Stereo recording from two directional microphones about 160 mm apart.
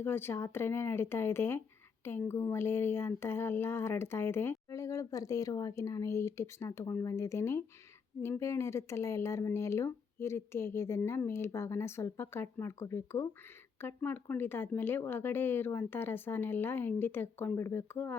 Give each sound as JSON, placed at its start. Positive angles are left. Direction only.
{"t": 0.0, "sound": "speech", "side_deg": 15}